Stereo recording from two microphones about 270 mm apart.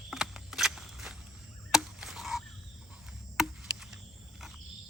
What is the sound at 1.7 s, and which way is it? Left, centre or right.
Frog, centre.